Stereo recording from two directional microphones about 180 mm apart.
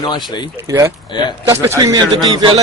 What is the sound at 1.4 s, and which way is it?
A man's voice, 15° right (ahead or behind).